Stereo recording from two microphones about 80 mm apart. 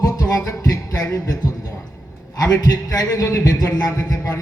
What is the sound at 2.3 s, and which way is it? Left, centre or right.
A man's voice, left.